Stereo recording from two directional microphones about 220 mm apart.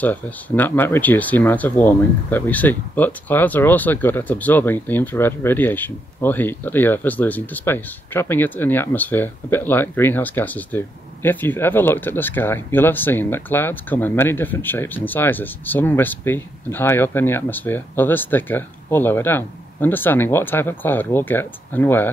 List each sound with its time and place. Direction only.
0.0 s speech: 10° left (ahead or behind)